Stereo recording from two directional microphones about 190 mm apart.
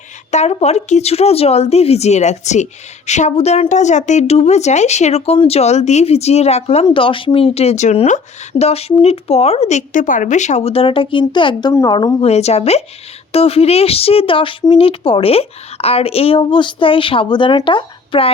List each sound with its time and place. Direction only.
0.3 s speech: 35° left (ahead or behind)